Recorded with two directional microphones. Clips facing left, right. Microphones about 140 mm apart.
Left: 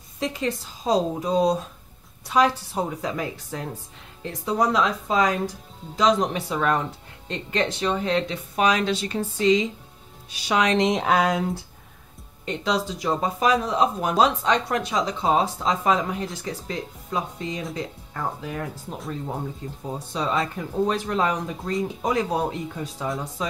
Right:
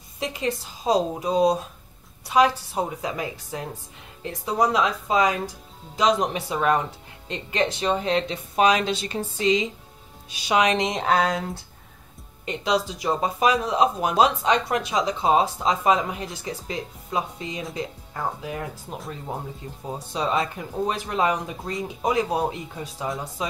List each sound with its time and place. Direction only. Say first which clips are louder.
0.2 s speech: left 1 dB; 10° right (ahead or behind)
7.8 s speech: even; 20° right (ahead or behind)
10.9 s speech: left 1 dB; 5° left (ahead or behind)
12.4 s speech: right 1 dB; 10° right (ahead or behind)
19.9 s speech: right 1 dB; 15° right (ahead or behind)